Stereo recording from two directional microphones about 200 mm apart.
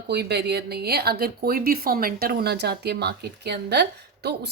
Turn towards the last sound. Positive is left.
turn(degrees=-55)  # may be behind; listen again after turning